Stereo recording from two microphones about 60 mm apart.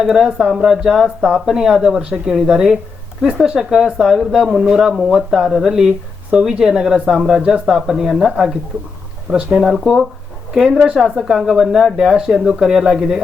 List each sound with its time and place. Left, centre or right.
0.0 s speech: centre
6.3 s speech: centre